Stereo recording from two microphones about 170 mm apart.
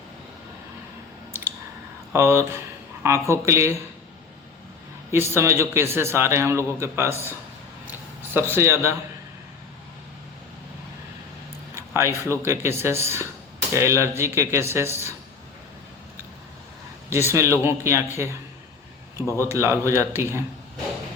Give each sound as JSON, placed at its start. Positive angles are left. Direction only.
{"t": 2.1, "sound": "a man's voice", "side_deg": -15}
{"t": 5.1, "sound": "a man's voice", "side_deg": -15}
{"t": 7.1, "sound": "a man's voice", "side_deg": 15}
{"t": 7.9, "sound": "a sound", "side_deg": -10}
{"t": 8.5, "sound": "a man's voice", "side_deg": -15}
{"t": 11.7, "sound": "a man's voice", "side_deg": -15}
{"t": 17.1, "sound": "a man's voice", "side_deg": -15}
{"t": 19.5, "sound": "a man's voice", "side_deg": -15}